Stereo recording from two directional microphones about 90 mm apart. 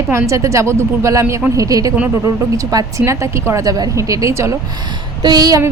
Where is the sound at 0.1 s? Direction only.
35° right (ahead or behind).